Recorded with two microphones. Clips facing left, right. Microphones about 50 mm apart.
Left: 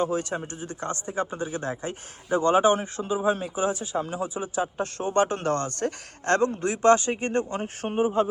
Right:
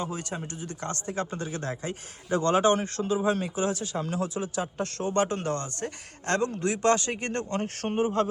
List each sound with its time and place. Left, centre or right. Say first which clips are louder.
0.0 s a man's voice: left 7 dB; left; by 8.3 s centre